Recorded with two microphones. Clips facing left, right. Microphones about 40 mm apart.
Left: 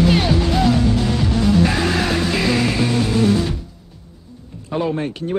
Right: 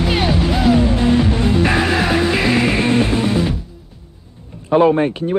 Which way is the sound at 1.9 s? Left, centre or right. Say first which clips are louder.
Right 3 dB; centre.